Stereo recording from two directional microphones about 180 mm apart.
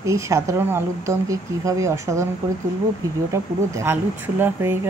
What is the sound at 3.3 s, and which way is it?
Speech, 15° right (ahead or behind).